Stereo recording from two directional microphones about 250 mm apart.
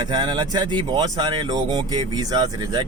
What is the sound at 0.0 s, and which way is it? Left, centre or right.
Speech, centre.